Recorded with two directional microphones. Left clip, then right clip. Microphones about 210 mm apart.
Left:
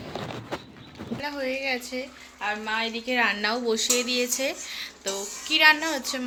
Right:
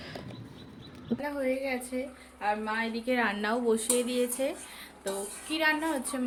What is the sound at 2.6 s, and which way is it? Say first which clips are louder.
Speech: left 3 dB; 15° right (ahead or behind).